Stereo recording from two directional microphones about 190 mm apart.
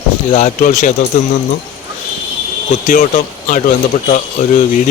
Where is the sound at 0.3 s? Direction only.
40° left (ahead or behind).